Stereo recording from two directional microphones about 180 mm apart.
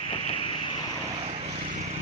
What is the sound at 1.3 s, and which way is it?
Vehicle, 35° right (ahead or behind).